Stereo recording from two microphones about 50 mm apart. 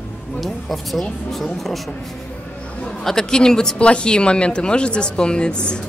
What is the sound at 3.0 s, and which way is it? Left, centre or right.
Speech, centre.